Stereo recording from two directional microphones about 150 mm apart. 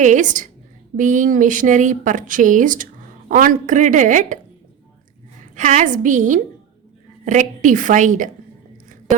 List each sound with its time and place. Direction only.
0.0 s speech: 55° right (ahead or behind)
5.5 s speech: 55° right (ahead or behind)